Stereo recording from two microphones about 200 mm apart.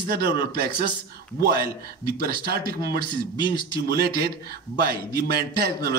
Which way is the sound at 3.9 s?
50° right (ahead or behind).